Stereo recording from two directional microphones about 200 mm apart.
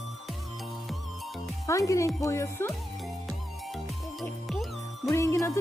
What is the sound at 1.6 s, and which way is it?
Speech, 15° left (ahead or behind).